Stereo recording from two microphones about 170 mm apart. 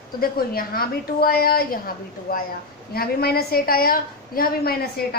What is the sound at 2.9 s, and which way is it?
A woman's voice, 65° left (ahead or behind).